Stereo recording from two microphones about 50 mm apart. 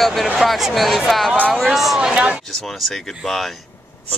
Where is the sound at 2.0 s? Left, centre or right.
Centre.